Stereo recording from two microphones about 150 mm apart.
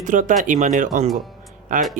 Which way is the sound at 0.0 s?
60° right (ahead or behind).